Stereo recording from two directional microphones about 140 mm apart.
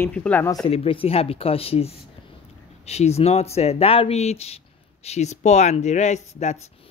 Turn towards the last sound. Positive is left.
turn(degrees=55)  # may be behind; listen again after turning